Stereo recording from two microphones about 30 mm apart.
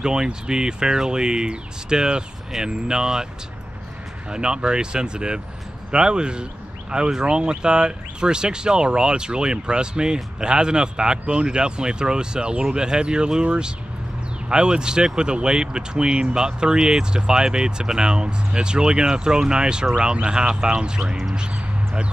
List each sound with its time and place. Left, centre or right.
0.0 s speech: right
4.3 s speech: right